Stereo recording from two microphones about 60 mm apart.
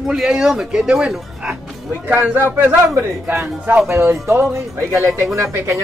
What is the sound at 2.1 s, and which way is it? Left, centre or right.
A man's voice, right.